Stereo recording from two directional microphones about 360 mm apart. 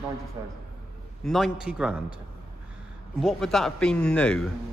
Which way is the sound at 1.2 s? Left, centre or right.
Centre.